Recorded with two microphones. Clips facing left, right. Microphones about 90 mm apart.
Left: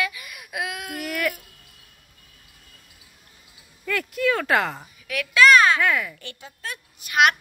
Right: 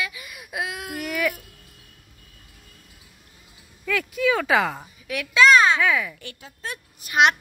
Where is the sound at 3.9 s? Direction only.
Centre (ahead or behind).